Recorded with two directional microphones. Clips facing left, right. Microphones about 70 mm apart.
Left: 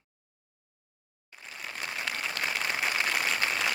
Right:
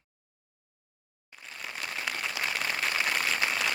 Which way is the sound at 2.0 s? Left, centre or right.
Centre.